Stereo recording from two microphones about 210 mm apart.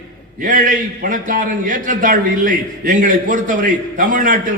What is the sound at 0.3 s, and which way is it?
A man's voice, 40° right (ahead or behind).